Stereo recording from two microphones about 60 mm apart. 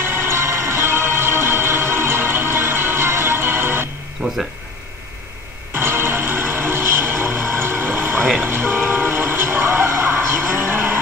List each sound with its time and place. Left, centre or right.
0.0 s music: right
5.7 s music: right
8.4 s train: right